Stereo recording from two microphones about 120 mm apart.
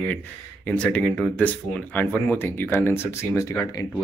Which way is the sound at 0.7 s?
10° left (ahead or behind).